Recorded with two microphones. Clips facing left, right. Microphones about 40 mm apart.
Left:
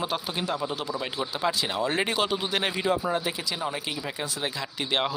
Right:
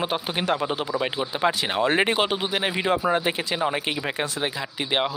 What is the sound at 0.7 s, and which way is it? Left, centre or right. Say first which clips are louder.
Speech: right 5 dB; right.